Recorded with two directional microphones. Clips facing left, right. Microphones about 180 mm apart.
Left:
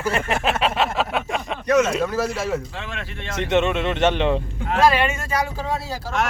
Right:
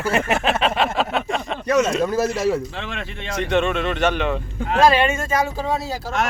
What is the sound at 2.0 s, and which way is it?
Speech, 40° right (ahead or behind).